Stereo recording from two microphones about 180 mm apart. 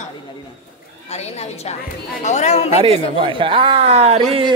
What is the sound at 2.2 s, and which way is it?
Speech, 40° left (ahead or behind).